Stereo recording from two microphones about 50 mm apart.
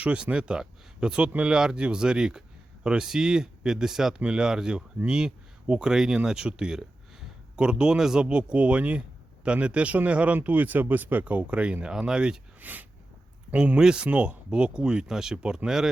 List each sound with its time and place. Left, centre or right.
0.0 s speech: right
12.5 s a sound: right
13.5 s speech: right
13.7 s speech: centre
14.1 s speech: right